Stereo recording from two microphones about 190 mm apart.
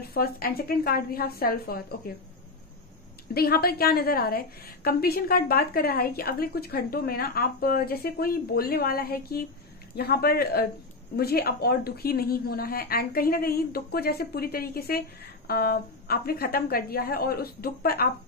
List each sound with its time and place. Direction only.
0.0 s a woman's voice: 55° left (ahead or behind)
3.3 s a woman's voice: 55° left (ahead or behind)